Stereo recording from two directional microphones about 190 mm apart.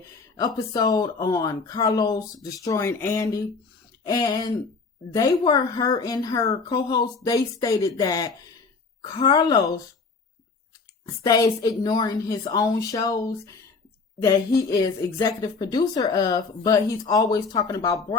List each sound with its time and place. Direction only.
0.3 s a woman's voice: 20° left (ahead or behind)
11.0 s a woman's voice: 20° left (ahead or behind)